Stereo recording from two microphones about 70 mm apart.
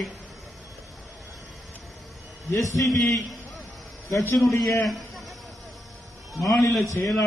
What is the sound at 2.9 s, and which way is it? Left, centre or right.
Speech, centre.